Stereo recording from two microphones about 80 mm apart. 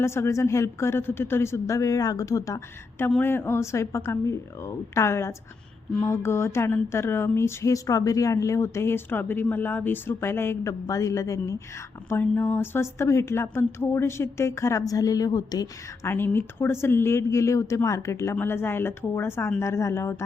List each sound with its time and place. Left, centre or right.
0.0 s speech: left
3.2 s speech: left
12.1 s speech: centre
12.4 s speech: left
16.0 s speech: left